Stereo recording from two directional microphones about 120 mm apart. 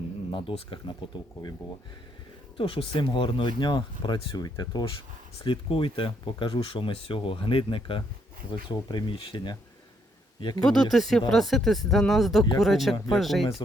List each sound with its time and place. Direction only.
0.3 s speech: 45° left (ahead or behind)
2.6 s speech: 45° left (ahead or behind)
5.4 s speech: 50° left (ahead or behind)
10.6 s speech: 5° left (ahead or behind)